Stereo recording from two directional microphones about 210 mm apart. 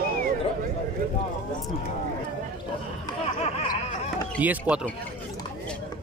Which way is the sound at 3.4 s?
30° left (ahead or behind).